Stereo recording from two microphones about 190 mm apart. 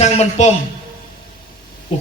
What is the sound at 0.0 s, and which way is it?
Speech, 35° left (ahead or behind).